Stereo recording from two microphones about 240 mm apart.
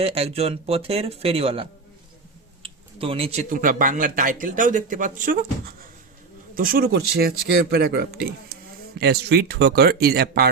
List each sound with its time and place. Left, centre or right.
0.0 s speech: right
2.6 s speech: right